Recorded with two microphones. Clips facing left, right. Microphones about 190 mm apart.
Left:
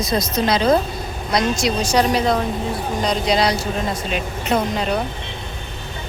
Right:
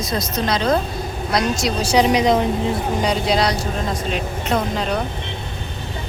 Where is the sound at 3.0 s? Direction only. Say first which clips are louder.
Left 2 dB; 5° right (ahead or behind).